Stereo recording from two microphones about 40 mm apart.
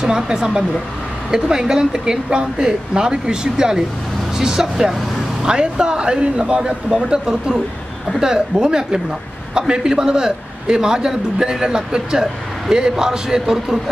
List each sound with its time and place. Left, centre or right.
0.0 s a man's voice: centre
8.2 s a man's voice: centre